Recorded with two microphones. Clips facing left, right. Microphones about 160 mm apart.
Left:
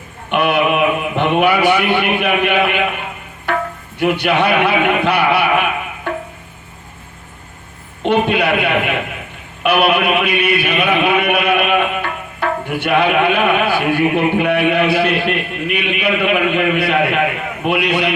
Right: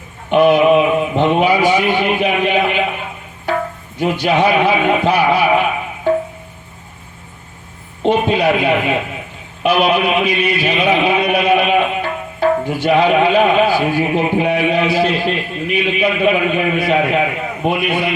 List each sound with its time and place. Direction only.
0.3 s a man's voice: 65° left (ahead or behind)
3.5 s a sound: 60° left (ahead or behind)
3.9 s a man's voice: 65° left (ahead or behind)
8.1 s a man's voice: 65° left (ahead or behind)
9.6 s a sound: 60° left (ahead or behind)
17.7 s a man's voice: 75° left (ahead or behind)